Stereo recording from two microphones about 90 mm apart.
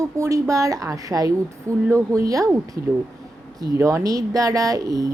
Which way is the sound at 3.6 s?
35° right (ahead or behind).